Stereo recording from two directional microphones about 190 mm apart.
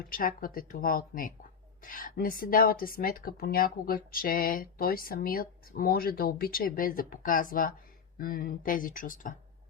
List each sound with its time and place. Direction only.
0.0 s speech: 50° left (ahead or behind)